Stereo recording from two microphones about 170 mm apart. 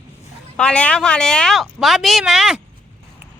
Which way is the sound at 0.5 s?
5° left (ahead or behind).